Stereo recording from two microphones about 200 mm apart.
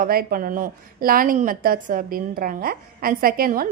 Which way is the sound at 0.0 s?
50° right (ahead or behind).